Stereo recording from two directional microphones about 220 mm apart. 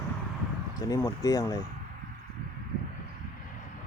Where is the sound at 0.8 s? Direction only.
15° left (ahead or behind).